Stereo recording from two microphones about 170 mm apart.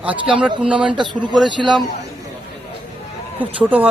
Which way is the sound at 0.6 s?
5° right (ahead or behind).